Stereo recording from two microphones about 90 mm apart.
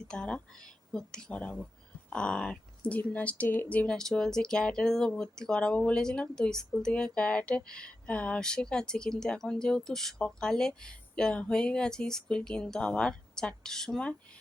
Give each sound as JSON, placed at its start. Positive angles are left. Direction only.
{"t": 0.1, "sound": "a woman's voice", "side_deg": 10}